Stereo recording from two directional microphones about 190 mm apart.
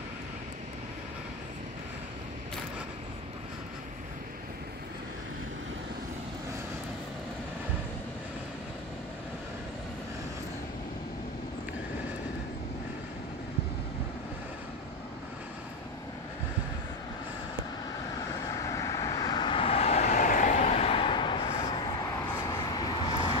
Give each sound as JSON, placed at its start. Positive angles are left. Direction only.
{"t": 18.6, "sound": "vehicle", "side_deg": 15}